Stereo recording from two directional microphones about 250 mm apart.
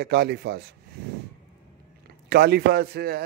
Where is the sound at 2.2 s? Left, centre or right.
Right.